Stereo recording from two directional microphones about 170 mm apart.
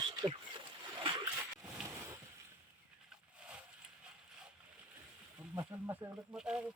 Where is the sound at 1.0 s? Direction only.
25° right (ahead or behind).